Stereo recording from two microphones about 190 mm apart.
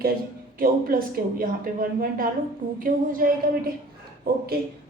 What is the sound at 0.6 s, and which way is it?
Speech, 50° right (ahead or behind).